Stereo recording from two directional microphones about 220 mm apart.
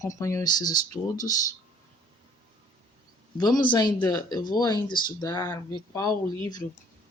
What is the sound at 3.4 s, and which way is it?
Speech, 20° left (ahead or behind).